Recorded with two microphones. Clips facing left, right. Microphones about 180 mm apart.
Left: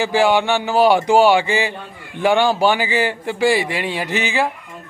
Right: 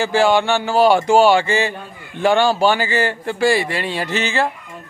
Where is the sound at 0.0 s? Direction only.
15° left (ahead or behind).